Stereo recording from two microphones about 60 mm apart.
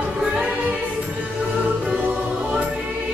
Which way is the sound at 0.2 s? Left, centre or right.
Centre.